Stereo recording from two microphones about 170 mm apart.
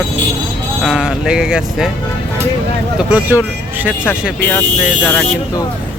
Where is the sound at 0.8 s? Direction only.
5° right (ahead or behind).